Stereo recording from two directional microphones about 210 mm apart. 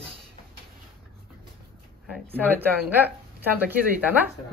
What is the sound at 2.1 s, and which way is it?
Speech, 10° right (ahead or behind).